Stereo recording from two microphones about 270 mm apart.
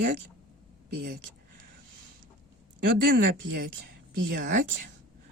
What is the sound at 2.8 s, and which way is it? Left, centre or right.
Speech, right.